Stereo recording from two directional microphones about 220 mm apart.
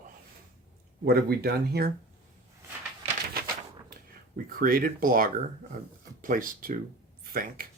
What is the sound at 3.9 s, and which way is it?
Speech, 40° right (ahead or behind).